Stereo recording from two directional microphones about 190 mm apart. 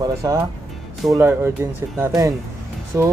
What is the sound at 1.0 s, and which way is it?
Speech, 5° right (ahead or behind).